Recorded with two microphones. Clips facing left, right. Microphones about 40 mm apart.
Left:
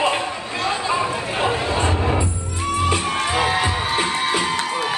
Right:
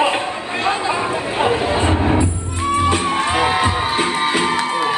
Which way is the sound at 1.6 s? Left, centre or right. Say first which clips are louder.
Right 4 dB; right.